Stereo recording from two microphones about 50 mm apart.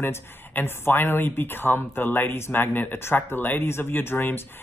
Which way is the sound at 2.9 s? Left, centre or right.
Left.